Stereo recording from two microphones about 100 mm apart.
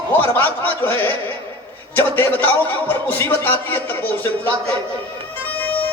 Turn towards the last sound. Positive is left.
turn(degrees=20)  # may be behind; listen again after turning